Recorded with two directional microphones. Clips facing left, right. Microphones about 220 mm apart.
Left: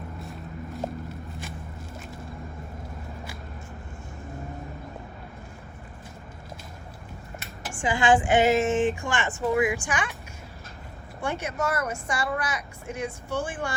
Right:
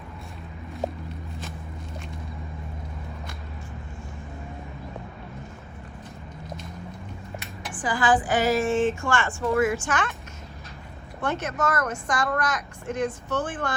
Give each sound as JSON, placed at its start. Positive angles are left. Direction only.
{"t": 0.3, "sound": "a sound", "side_deg": 0}
{"t": 7.8, "sound": "speech", "side_deg": 25}
{"t": 11.2, "sound": "a woman's voice", "side_deg": 10}